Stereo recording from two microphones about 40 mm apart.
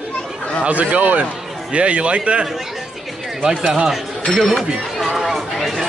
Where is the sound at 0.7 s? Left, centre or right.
Right.